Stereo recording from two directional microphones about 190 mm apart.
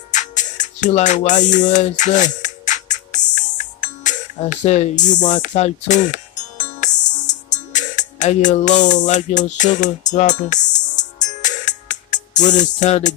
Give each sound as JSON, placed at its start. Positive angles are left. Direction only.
{"t": 0.1, "sound": "music", "side_deg": 40}